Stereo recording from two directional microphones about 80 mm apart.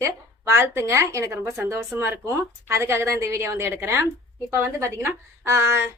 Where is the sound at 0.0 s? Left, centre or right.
Right.